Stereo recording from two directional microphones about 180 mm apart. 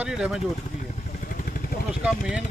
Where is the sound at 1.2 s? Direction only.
50° left (ahead or behind).